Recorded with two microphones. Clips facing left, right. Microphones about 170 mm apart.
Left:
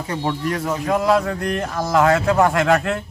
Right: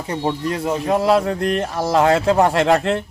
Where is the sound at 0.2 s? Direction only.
20° right (ahead or behind).